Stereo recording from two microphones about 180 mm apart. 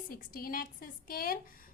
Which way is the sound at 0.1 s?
55° left (ahead or behind).